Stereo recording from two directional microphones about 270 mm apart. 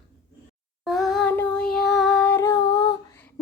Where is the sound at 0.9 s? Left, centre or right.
Centre.